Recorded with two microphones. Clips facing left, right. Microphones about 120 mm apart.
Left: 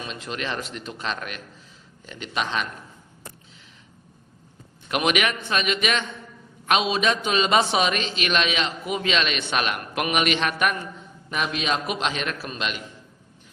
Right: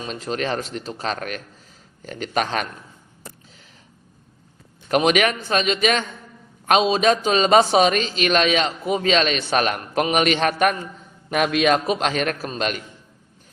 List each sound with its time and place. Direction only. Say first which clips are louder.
0.0 s a man's voice: right 6 dB; 40° right (ahead or behind)
4.9 s a man's voice: right 5 dB; 40° right (ahead or behind)
11.3 s speech: right 8 dB; 55° right (ahead or behind)